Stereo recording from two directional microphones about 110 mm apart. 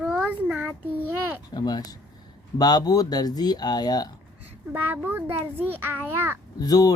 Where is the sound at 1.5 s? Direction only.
40° left (ahead or behind).